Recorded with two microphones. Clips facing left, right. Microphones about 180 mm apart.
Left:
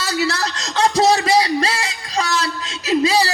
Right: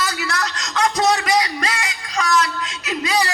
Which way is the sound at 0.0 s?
30° left (ahead or behind).